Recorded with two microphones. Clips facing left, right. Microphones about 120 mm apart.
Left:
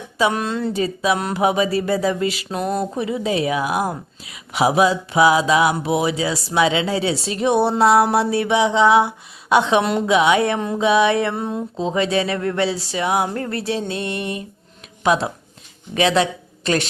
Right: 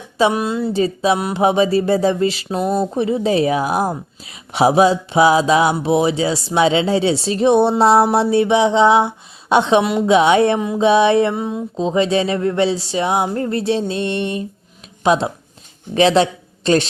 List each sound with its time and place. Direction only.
0.3 s speech: 10° right (ahead or behind)
0.7 s speech: 30° right (ahead or behind)
2.6 s speech: centre (ahead or behind)
2.9 s a woman's voice: 30° right (ahead or behind)
11.3 s speech: centre (ahead or behind)
11.8 s speech: 20° right (ahead or behind)